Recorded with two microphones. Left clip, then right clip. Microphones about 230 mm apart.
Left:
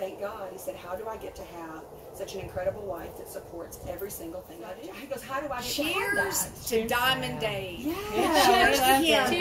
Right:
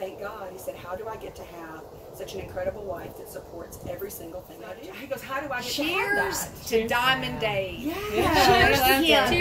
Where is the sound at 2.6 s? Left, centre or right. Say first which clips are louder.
Even; centre.